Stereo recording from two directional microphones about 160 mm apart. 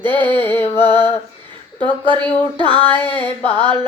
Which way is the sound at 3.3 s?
35° left (ahead or behind).